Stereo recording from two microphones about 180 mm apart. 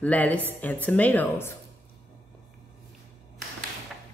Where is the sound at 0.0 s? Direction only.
10° left (ahead or behind).